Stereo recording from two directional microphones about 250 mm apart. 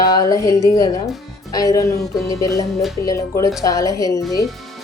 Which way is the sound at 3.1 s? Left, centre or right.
Centre.